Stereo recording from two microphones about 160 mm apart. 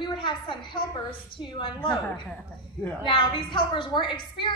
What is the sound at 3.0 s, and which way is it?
A woman's voice, 30° left (ahead or behind).